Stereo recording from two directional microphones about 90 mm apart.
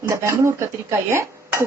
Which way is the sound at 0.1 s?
30° right (ahead or behind).